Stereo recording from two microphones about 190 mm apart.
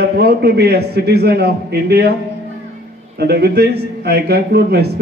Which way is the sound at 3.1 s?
55° right (ahead or behind).